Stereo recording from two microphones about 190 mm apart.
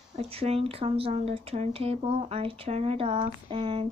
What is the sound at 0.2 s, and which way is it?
Speech, 30° right (ahead or behind).